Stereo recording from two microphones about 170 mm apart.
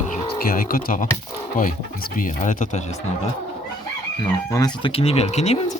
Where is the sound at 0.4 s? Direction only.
55° left (ahead or behind).